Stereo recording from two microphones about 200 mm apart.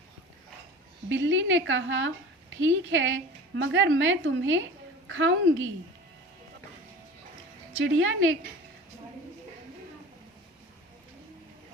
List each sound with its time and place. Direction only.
1.1 s a woman's voice: 70° right (ahead or behind)
7.9 s a woman's voice: 90° right